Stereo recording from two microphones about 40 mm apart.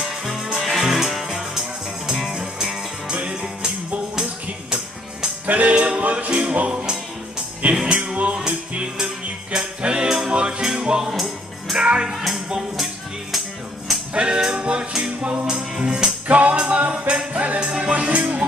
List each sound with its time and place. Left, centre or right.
0.0 s music: centre
3.1 s music: right
5.5 s music: right
7.7 s music: right
10.0 s music: centre
10.3 s music: right
12.1 s music: centre
14.1 s music: right
16.3 s music: right
17.6 s music: centre
17.9 s music: right